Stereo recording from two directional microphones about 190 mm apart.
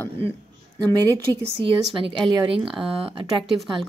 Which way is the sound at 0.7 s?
25° right (ahead or behind).